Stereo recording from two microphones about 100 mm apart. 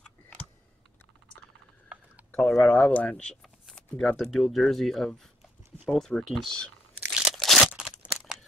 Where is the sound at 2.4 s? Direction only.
5° left (ahead or behind).